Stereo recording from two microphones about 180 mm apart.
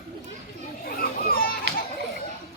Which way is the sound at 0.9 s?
55° left (ahead or behind).